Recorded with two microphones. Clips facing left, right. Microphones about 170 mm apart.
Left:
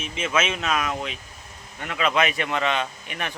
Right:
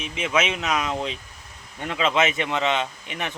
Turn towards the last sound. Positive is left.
turn(degrees=-20)  # may be behind; listen again after turning